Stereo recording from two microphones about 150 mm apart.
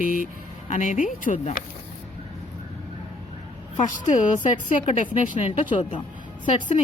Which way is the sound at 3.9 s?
60° left (ahead or behind).